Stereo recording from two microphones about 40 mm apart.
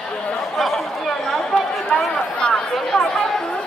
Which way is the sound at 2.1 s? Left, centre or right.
Left.